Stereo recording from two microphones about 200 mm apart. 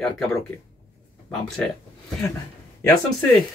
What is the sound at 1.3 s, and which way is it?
Speech, 5° left (ahead or behind).